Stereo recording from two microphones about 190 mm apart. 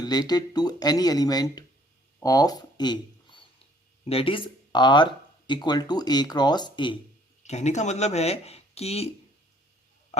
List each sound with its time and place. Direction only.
0.0 s speech: 20° left (ahead or behind)
2.2 s a sound: 20° left (ahead or behind)
5.5 s speech: 25° left (ahead or behind)
7.4 s speech: 35° left (ahead or behind)